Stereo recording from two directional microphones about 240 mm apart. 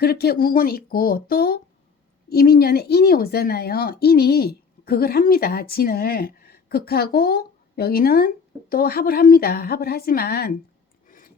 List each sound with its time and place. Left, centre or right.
0.0 s speech: left